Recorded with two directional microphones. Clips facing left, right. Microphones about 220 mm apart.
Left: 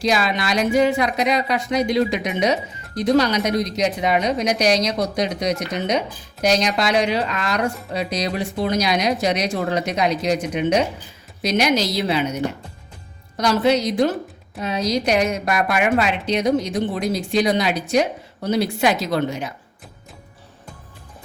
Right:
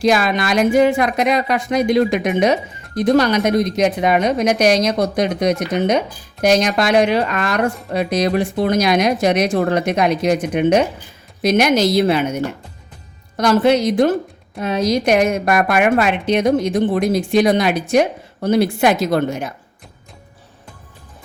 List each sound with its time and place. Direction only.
0.0 s speech: 50° right (ahead or behind)